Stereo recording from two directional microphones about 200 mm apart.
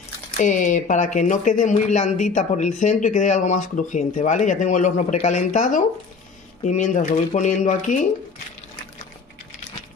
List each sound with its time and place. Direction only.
0.4 s speech: 40° left (ahead or behind)